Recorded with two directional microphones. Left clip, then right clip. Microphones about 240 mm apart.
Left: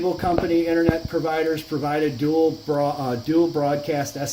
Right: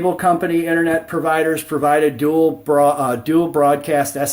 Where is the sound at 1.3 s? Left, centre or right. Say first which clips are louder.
Right 7 dB; right.